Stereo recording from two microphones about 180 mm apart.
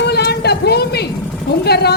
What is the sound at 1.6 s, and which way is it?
Speech, 65° left (ahead or behind).